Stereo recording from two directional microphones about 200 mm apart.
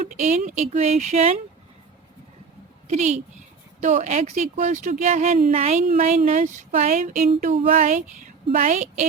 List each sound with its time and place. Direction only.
0.1 s speech: 35° right (ahead or behind)
2.8 s a woman's voice: 35° right (ahead or behind)